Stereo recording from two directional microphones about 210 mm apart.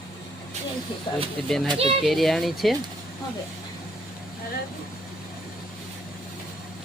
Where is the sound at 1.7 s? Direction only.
25° right (ahead or behind).